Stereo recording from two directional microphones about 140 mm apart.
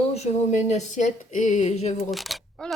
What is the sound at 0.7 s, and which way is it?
Speech, 55° left (ahead or behind).